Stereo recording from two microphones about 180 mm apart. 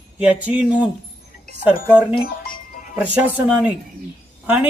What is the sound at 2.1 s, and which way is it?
Music, 50° left (ahead or behind).